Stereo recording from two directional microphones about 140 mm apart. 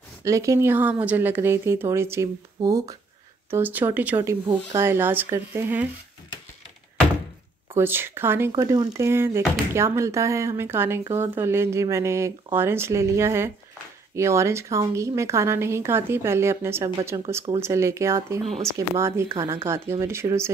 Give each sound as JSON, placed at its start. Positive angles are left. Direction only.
{"t": 0.2, "sound": "speech", "side_deg": -20}
{"t": 3.4, "sound": "speech", "side_deg": -15}
{"t": 7.7, "sound": "a woman's voice", "side_deg": -15}